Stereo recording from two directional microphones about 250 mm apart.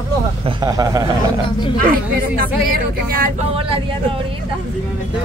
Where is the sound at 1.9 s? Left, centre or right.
Right.